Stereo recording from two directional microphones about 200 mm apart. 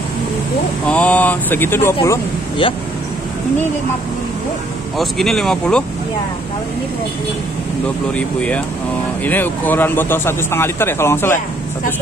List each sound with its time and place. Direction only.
0.8 s speech: 5° left (ahead or behind)
2.6 s speech: 25° left (ahead or behind)
4.9 s speech: centre (ahead or behind)
8.2 s speech: 5° left (ahead or behind)